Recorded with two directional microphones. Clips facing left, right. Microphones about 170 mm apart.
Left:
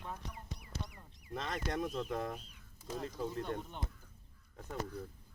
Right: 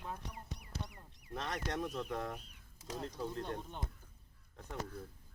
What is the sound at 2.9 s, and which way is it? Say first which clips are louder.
Speech: left 2 dB; 5° left (ahead or behind).